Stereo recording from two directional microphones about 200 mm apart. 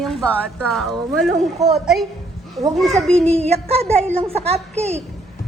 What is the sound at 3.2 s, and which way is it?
A child's voice, 30° right (ahead or behind).